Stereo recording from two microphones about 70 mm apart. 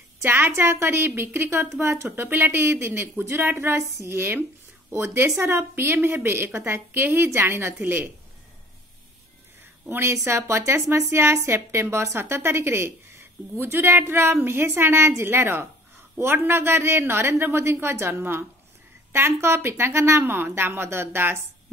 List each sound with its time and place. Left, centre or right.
0.2 s a woman's voice: right
9.8 s speech: right